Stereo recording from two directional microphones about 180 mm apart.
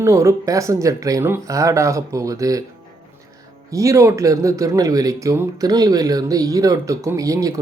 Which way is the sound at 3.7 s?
15° right (ahead or behind).